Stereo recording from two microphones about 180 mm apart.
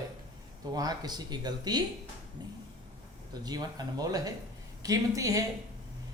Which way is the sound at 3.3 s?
20° right (ahead or behind).